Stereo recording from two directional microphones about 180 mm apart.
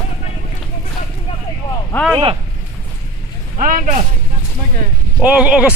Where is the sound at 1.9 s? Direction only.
Centre (ahead or behind).